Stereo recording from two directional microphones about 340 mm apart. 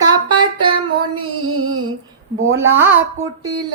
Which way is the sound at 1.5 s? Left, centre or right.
Right.